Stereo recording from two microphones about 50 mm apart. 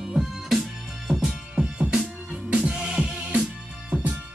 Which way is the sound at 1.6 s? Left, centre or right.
Centre.